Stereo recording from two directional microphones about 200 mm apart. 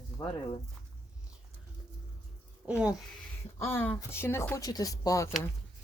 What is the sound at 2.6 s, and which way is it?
Speech, 5° right (ahead or behind).